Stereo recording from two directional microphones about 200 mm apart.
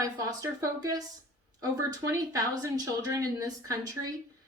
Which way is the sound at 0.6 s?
20° right (ahead or behind).